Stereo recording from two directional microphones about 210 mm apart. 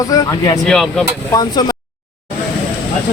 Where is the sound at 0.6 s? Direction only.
Centre (ahead or behind).